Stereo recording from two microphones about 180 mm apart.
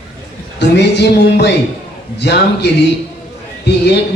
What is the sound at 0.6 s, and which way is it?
A man's voice, 70° left (ahead or behind).